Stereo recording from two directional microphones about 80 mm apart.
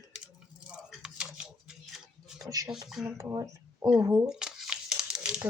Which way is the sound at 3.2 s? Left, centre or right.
Right.